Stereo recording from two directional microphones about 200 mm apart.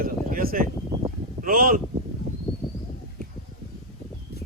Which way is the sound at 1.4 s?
45° right (ahead or behind).